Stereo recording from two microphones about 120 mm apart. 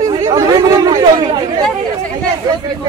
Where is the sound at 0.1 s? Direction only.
35° right (ahead or behind).